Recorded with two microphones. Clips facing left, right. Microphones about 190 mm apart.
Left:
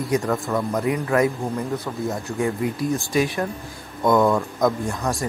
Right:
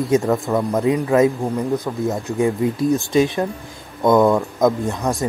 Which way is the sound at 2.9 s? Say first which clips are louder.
Right 5 dB; 20° right (ahead or behind).